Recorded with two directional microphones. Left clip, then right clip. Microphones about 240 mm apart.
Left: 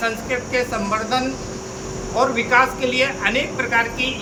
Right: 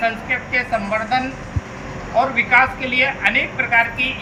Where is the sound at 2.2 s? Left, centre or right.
Centre.